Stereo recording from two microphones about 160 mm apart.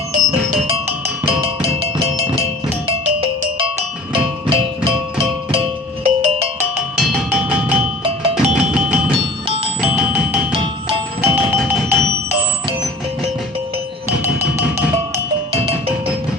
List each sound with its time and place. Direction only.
1.8 s music: 30° right (ahead or behind)
4.1 s music: 35° right (ahead or behind)
7.0 s music: 5° right (ahead or behind)
8.0 s music: 45° right (ahead or behind)
8.7 s music: 10° right (ahead or behind)
15.5 s music: 35° right (ahead or behind)